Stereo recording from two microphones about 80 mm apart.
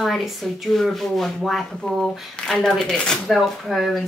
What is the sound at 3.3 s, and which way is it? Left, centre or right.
Speech, centre.